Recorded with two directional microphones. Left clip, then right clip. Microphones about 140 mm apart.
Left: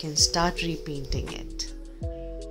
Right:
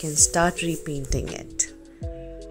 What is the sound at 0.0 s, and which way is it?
Speech, 25° right (ahead or behind).